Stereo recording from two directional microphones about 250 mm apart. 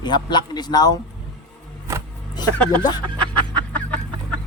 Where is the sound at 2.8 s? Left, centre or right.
Centre.